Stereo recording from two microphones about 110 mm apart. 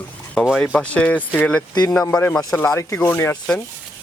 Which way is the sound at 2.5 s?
25° left (ahead or behind).